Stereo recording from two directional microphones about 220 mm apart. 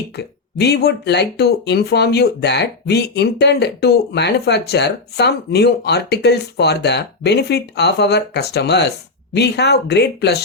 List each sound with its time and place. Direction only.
0.2 s speech: 50° left (ahead or behind)